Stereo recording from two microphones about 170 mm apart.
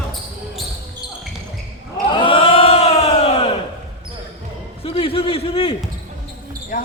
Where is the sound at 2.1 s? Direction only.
30° left (ahead or behind).